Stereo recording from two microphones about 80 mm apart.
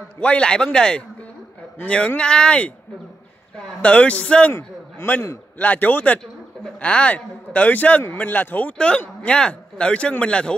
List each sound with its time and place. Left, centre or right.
0.2 s a man's voice: centre